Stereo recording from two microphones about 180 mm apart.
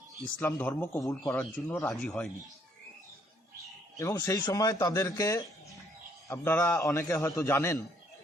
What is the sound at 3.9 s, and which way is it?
A man's voice, 15° left (ahead or behind).